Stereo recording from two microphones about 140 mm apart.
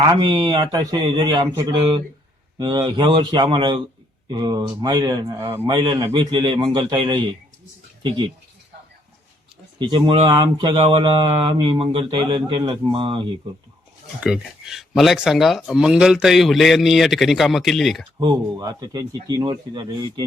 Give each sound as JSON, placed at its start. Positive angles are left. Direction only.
{"t": 0.1, "sound": "speech", "side_deg": -30}
{"t": 9.7, "sound": "speech", "side_deg": -35}
{"t": 14.2, "sound": "speech", "side_deg": -5}
{"t": 18.2, "sound": "speech", "side_deg": -30}